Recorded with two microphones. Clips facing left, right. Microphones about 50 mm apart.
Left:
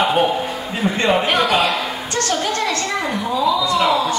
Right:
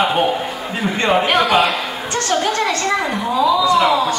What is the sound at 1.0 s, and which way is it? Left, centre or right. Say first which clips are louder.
Speech: right 2 dB; centre.